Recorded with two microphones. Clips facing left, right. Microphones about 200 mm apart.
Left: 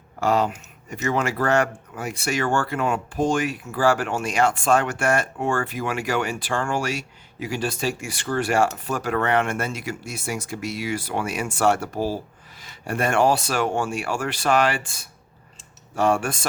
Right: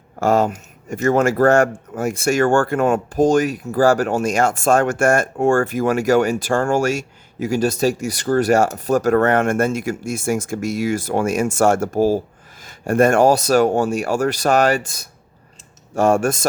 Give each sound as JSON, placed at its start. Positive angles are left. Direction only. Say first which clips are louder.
{"t": 0.2, "sound": "speech", "louder": "right 5 dB", "side_deg": -45}